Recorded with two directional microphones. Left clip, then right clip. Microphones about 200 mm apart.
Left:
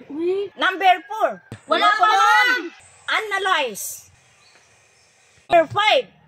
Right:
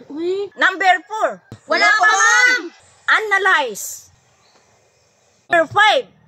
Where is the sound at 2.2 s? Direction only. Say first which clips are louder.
Right 3 dB; 30° right (ahead or behind).